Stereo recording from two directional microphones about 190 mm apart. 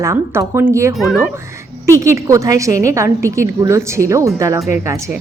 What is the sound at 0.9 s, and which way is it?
Speech, 5° right (ahead or behind).